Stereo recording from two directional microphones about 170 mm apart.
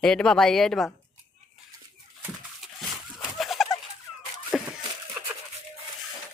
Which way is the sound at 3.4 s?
Centre (ahead or behind).